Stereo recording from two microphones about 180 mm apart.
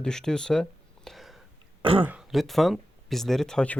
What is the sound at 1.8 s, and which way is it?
Throat clearing, 30° right (ahead or behind).